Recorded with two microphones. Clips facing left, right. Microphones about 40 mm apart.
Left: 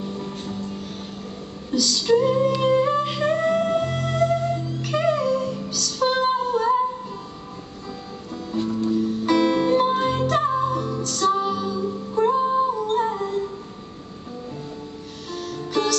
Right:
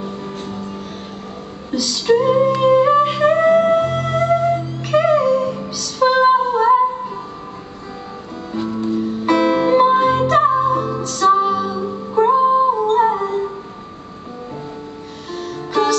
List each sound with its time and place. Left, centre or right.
0.0 s music: centre
1.7 s music: centre
8.8 s music: centre; by 13.5 s right
15.3 s music: centre